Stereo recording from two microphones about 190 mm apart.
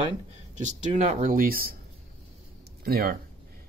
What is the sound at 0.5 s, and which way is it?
Speech, 40° right (ahead or behind).